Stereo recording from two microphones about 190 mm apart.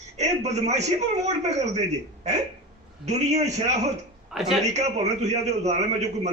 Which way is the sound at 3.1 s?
35° right (ahead or behind).